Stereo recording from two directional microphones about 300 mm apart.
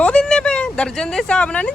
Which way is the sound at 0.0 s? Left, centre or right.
Centre.